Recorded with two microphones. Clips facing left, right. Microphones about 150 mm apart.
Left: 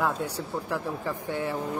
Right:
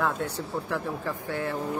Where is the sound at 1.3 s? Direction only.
15° left (ahead or behind).